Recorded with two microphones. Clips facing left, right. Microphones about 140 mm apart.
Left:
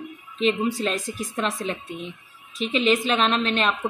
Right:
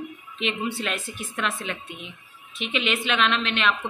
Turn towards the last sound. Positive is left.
turn(degrees=40)  # may be behind; listen again after turning